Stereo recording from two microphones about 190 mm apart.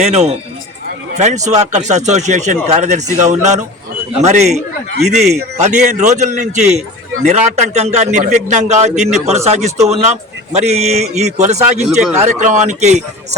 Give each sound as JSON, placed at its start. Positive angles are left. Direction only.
{"t": 0.0, "sound": "speech", "side_deg": -35}